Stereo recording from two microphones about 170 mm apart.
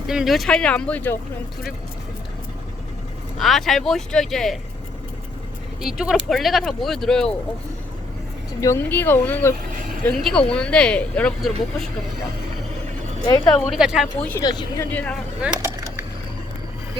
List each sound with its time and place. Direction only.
0.1 s speech: centre (ahead or behind)
3.3 s speech: centre (ahead or behind)
5.8 s speech: 5° right (ahead or behind)
8.6 s speech: 15° left (ahead or behind)
13.2 s speech: 20° left (ahead or behind)
13.7 s speech: 5° right (ahead or behind)
14.3 s speech: 20° left (ahead or behind)
14.8 s speech: 10° left (ahead or behind)
15.4 s a sound: 15° right (ahead or behind)